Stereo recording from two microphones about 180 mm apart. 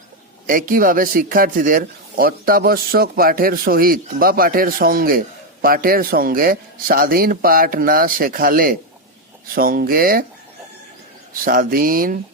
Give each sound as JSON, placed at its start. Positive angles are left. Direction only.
{"t": 0.4, "sound": "speech", "side_deg": -50}
{"t": 11.4, "sound": "speech", "side_deg": -50}